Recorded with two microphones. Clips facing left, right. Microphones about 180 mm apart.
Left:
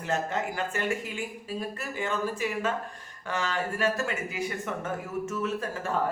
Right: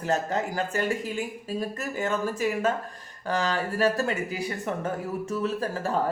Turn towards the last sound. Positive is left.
turn(degrees=-35)  # may be behind; listen again after turning